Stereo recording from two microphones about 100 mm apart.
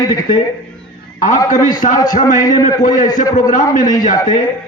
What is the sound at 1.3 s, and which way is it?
A man's voice, 40° left (ahead or behind).